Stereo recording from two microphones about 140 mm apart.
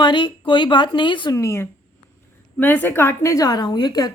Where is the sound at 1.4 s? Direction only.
20° left (ahead or behind).